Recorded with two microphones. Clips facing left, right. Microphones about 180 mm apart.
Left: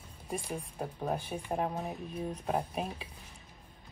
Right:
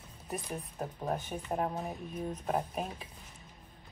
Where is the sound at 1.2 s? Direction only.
10° left (ahead or behind).